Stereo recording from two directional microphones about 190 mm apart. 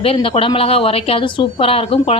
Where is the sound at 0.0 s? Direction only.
30° left (ahead or behind).